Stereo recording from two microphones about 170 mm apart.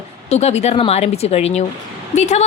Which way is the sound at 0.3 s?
40° left (ahead or behind).